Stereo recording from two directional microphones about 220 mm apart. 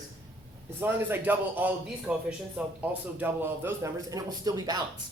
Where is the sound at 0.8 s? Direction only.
10° right (ahead or behind).